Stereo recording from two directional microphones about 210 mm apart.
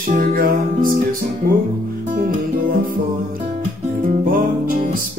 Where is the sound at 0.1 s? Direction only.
45° right (ahead or behind).